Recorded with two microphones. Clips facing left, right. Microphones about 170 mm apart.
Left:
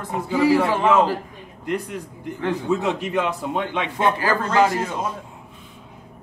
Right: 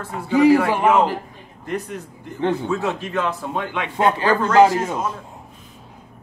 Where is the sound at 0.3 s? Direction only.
20° right (ahead or behind).